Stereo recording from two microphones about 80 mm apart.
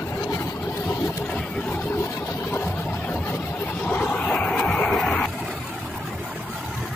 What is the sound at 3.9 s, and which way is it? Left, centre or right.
Vehicle, centre.